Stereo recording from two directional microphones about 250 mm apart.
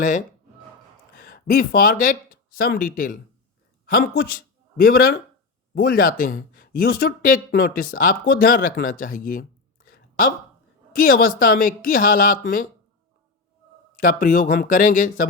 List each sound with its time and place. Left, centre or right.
0.0 s speech: left
9.9 s a sound: left
10.9 s speech: left
13.9 s speech: left